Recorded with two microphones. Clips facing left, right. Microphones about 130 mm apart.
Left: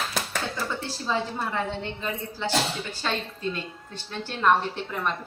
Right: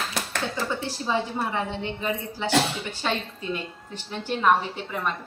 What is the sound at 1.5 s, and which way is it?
Speech, 15° right (ahead or behind).